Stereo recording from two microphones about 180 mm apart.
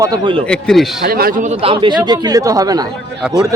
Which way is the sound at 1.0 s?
55° right (ahead or behind).